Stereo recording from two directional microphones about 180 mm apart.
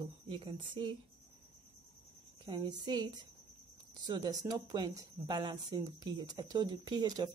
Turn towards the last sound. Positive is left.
turn(degrees=-20)  # may be behind; listen again after turning